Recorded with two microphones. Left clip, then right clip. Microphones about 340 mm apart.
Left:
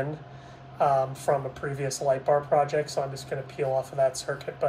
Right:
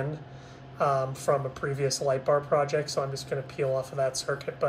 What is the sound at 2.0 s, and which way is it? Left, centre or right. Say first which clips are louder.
Speech: left 3 dB; right.